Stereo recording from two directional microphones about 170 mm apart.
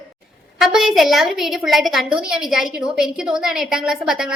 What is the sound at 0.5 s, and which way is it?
A woman's voice, centre (ahead or behind).